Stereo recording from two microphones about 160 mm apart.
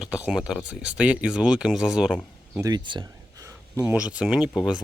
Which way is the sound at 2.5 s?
25° right (ahead or behind).